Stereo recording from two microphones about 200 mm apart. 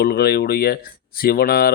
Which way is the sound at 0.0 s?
50° left (ahead or behind).